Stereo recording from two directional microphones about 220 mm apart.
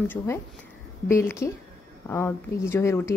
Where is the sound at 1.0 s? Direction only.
10° left (ahead or behind).